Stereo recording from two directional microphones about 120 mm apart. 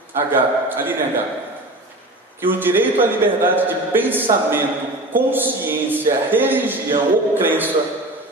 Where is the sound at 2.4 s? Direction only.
15° right (ahead or behind).